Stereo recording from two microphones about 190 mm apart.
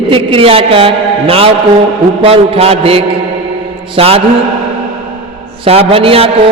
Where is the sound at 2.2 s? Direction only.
30° right (ahead or behind).